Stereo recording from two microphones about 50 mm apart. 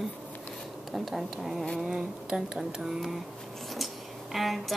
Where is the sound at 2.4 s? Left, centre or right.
Centre.